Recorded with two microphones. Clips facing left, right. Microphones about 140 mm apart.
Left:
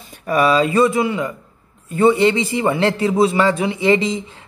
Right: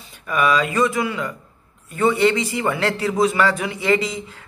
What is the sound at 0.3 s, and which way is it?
A man's voice, 30° left (ahead or behind).